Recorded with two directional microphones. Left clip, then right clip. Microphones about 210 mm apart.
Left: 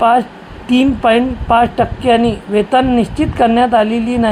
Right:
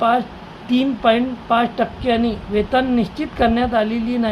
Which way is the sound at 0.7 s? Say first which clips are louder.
Left 5 dB; 20° left (ahead or behind).